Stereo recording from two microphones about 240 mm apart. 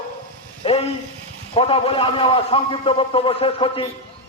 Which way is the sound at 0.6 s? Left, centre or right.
Left.